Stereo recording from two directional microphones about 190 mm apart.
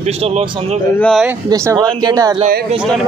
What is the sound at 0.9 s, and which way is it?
Speech, 5° left (ahead or behind).